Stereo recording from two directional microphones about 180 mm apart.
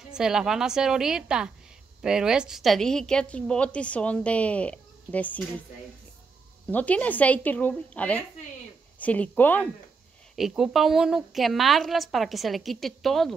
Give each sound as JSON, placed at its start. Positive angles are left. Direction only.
{"t": 0.1, "sound": "a woman's voice", "side_deg": -5}
{"t": 6.7, "sound": "a woman's voice", "side_deg": 10}
{"t": 10.3, "sound": "a woman's voice", "side_deg": 0}